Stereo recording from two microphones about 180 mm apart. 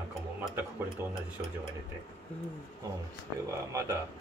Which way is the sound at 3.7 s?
15° right (ahead or behind).